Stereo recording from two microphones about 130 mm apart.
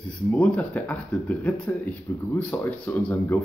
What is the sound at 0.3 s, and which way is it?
A man's voice, 10° left (ahead or behind).